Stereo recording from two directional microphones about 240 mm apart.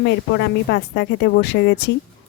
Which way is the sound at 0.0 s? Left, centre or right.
Left.